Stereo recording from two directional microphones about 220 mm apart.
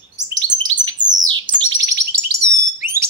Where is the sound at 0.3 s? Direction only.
60° right (ahead or behind).